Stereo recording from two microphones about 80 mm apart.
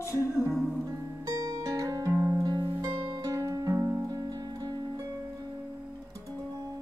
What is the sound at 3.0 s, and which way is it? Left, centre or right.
Music, right.